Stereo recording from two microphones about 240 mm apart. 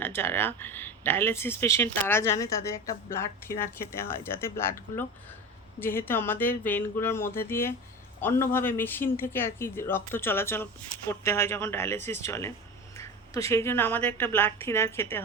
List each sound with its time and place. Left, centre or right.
0.0 s speech: centre
5.8 s speech: centre